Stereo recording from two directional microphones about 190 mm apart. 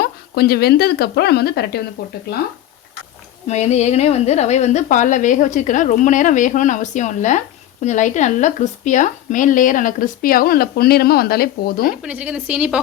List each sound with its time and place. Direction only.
0.0 s a woman's voice: 55° left (ahead or behind)
3.4 s a woman's voice: 35° left (ahead or behind); by 11.9 s 50° left (ahead or behind)
12.0 s a woman's voice: 5° right (ahead or behind)